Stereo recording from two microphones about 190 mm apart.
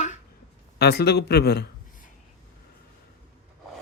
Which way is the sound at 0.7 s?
60° left (ahead or behind).